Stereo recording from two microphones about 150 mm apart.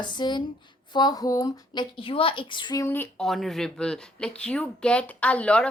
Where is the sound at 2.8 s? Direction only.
15° left (ahead or behind).